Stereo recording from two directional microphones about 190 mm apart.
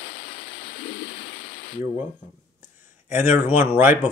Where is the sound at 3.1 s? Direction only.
10° right (ahead or behind).